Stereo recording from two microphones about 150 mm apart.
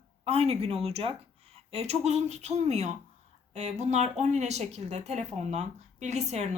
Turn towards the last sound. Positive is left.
turn(degrees=-50)  # may be behind; listen again after turning